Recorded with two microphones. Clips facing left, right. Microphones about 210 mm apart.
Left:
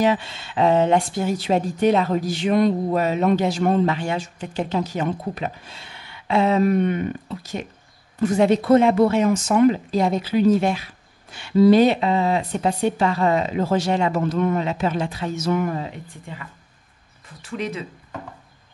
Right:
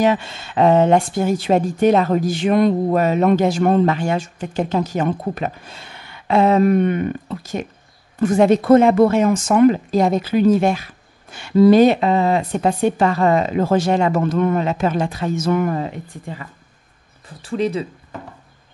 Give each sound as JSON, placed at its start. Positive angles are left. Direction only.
{"t": 0.0, "sound": "speech", "side_deg": -50}
{"t": 17.4, "sound": "speech", "side_deg": -30}